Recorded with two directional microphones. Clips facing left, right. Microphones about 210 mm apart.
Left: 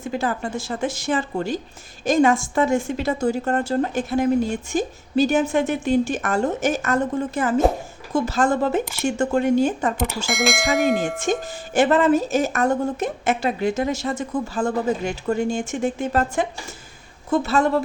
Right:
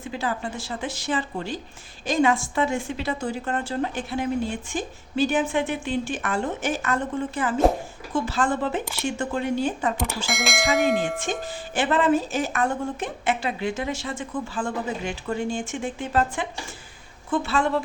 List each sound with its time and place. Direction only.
0.0 s a woman's voice: 45° left (ahead or behind)
10.2 s speech: centre (ahead or behind)
11.3 s a woman's voice: 45° left (ahead or behind)